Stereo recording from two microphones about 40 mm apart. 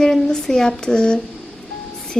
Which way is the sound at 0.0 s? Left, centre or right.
Centre.